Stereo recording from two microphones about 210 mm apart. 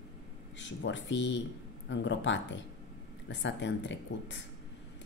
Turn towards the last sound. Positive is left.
turn(degrees=60)  # may be behind; listen again after turning